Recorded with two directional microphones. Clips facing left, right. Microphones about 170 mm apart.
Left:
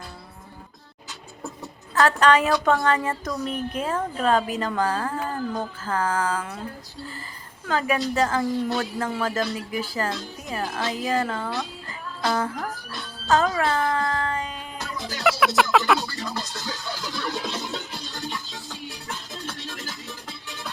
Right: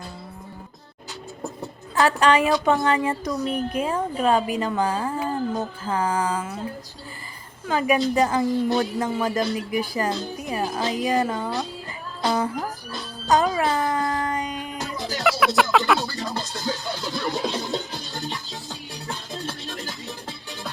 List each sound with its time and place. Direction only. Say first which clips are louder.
2.0 s a woman's voice: even; 10° right (ahead or behind)
7.7 s a woman's voice: right 3 dB; 15° right (ahead or behind)
13.2 s music: right 1 dB; 15° right (ahead or behind)
15.2 s music: even; centre (ahead or behind)
16.3 s music: right 4 dB; 30° right (ahead or behind)
19.0 s music: right 6 dB; 30° right (ahead or behind)